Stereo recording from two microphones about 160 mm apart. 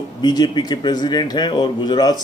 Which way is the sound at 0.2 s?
25° left (ahead or behind).